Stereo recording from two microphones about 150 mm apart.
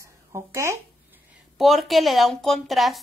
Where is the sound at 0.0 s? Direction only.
20° right (ahead or behind).